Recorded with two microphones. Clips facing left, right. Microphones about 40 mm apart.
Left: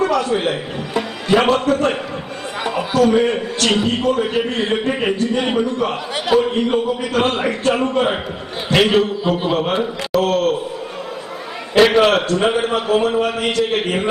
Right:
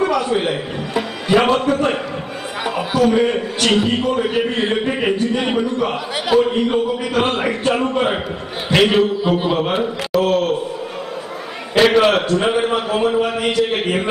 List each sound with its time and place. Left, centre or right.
0.0 s a man's voice: centre
11.7 s a man's voice: centre